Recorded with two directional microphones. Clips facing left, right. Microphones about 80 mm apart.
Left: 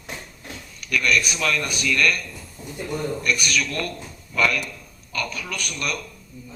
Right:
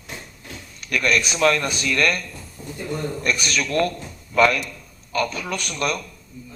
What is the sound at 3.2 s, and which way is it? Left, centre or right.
A man's voice, right.